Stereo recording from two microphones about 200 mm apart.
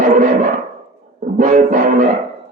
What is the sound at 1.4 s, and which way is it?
Music, 40° right (ahead or behind).